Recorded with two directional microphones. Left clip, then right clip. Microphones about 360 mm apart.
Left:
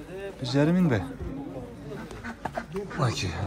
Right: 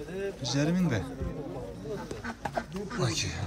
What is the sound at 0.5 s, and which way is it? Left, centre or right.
Speech, centre.